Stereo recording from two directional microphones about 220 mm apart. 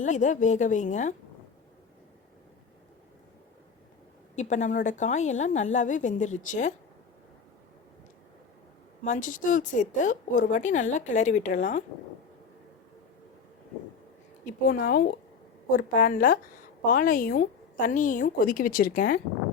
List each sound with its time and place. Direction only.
0.0 s a woman's voice: 35° left (ahead or behind)
4.4 s a woman's voice: 30° left (ahead or behind)
9.0 s a woman's voice: 35° left (ahead or behind)
14.4 s a woman's voice: 40° left (ahead or behind)